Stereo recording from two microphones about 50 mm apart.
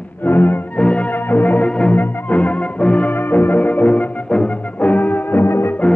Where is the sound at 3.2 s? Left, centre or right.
Left.